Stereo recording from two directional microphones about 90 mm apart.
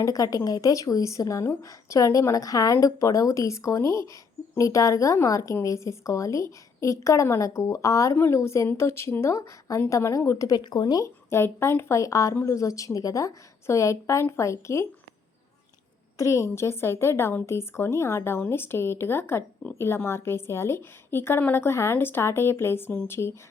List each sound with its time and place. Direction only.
0.0 s a woman's voice: 40° left (ahead or behind)
10.5 s speech: 55° left (ahead or behind)
11.0 s a woman's voice: 30° left (ahead or behind)
16.1 s a woman's voice: 35° left (ahead or behind)